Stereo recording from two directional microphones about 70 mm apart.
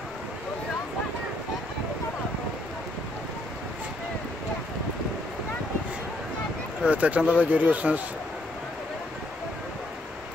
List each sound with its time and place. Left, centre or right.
6.8 s speech: centre